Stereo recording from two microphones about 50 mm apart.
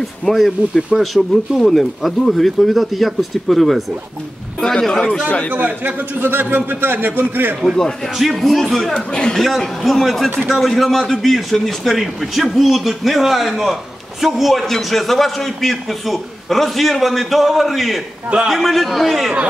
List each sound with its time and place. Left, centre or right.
0.0 s a man's voice: centre
5.5 s a man's voice: right
6.1 s a man's voice: right
8.2 s a man's voice: centre
8.9 s speech: centre
9.4 s a man's voice: centre